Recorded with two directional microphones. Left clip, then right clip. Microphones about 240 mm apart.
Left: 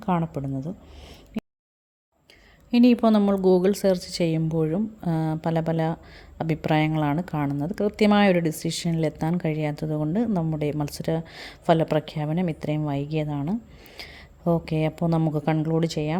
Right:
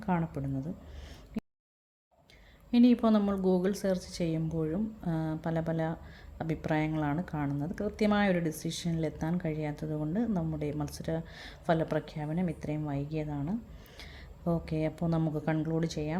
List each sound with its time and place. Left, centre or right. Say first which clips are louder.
0.0 s speech: left 7 dB; left
1.4 s a sound: left 6 dB; centre
2.7 s speech: left 7 dB; left